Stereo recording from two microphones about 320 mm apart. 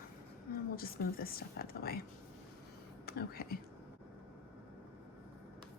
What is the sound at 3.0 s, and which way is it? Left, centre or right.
Speech, left.